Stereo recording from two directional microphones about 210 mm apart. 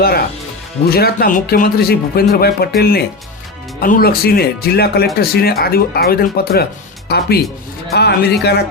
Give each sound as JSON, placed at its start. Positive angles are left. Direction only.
{"t": 0.9, "sound": "speech", "side_deg": 45}